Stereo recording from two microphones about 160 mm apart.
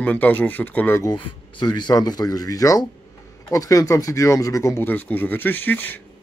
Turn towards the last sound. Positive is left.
turn(degrees=10)  # may be behind; listen again after turning